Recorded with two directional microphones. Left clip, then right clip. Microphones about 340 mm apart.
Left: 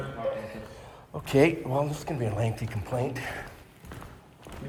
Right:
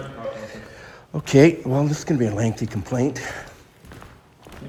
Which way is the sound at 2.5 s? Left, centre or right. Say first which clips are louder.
Right 8 dB; centre.